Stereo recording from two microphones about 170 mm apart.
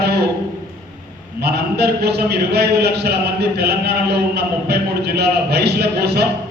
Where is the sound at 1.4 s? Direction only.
75° right (ahead or behind).